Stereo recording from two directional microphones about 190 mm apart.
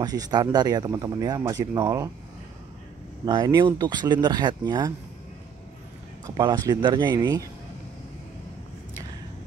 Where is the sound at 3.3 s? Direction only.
20° right (ahead or behind).